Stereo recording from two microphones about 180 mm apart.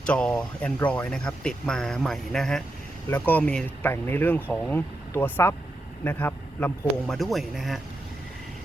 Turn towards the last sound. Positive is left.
turn(degrees=0)  # may be behind; listen again after turning